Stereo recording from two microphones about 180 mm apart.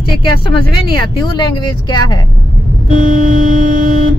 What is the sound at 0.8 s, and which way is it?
Speech, 25° left (ahead or behind).